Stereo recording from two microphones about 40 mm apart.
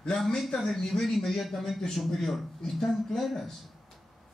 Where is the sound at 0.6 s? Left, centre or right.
Centre.